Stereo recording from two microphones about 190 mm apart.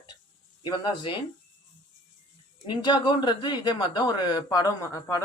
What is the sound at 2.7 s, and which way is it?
Speech, 25° left (ahead or behind).